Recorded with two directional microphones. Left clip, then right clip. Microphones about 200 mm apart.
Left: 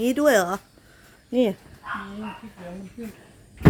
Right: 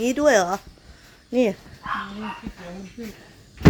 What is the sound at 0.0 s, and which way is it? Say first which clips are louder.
Speech: right 1 dB; 10° left (ahead or behind).